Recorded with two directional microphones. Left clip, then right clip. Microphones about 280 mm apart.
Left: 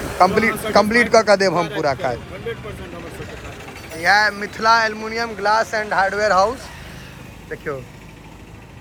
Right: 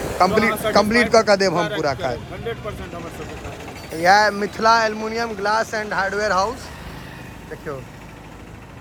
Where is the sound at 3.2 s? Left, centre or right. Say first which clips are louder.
Right 1 dB; right.